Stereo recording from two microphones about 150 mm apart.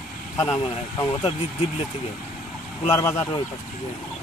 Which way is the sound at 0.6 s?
35° left (ahead or behind).